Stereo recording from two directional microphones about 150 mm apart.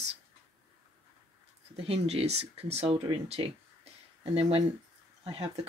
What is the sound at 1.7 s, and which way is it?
Speech, 40° right (ahead or behind).